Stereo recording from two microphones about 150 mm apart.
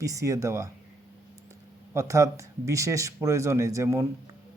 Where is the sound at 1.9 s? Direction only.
20° right (ahead or behind).